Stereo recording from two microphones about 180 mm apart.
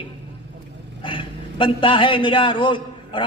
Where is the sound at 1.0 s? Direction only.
30° left (ahead or behind).